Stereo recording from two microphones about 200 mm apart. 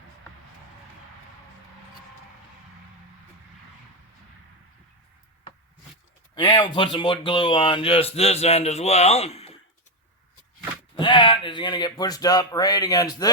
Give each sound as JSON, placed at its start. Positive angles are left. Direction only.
{"t": 6.3, "sound": "speech", "side_deg": 25}
{"t": 10.9, "sound": "speech", "side_deg": 25}